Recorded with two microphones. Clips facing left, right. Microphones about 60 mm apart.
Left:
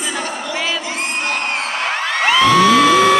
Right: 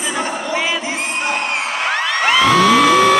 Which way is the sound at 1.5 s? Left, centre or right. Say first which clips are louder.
Right 1 dB; centre.